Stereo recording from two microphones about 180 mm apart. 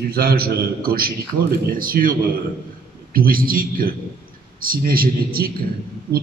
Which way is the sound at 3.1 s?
55° right (ahead or behind).